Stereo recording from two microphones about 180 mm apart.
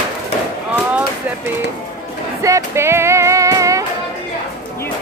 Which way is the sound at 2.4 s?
15° right (ahead or behind).